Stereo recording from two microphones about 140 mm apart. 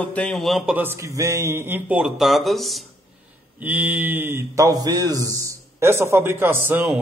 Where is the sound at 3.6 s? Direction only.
10° right (ahead or behind).